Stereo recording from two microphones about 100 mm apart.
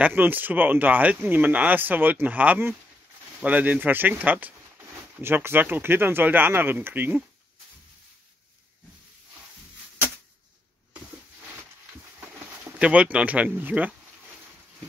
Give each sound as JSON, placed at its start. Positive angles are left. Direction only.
{"t": 0.0, "sound": "speech", "side_deg": -20}
{"t": 12.7, "sound": "speech", "side_deg": -10}